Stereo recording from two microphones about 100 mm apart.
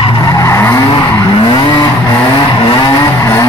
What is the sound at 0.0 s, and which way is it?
Vehicle, 50° left (ahead or behind).